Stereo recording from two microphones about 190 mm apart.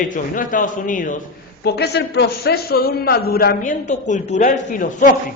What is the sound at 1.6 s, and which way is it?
A man's voice, 60° left (ahead or behind).